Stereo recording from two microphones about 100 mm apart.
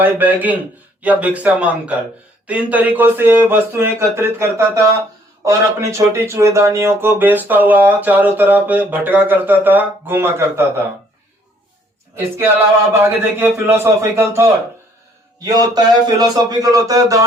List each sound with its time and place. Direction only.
0.0 s a man's voice: 20° right (ahead or behind)
12.9 s speech: 25° right (ahead or behind)
15.4 s a man's voice: 40° right (ahead or behind)